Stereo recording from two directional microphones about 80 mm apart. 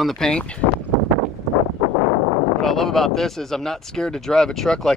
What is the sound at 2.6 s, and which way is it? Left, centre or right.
Speech, centre.